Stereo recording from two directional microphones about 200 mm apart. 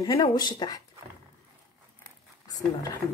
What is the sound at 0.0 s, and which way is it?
Speech, 20° left (ahead or behind).